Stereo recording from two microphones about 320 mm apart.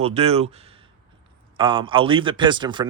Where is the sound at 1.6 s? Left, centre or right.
Centre.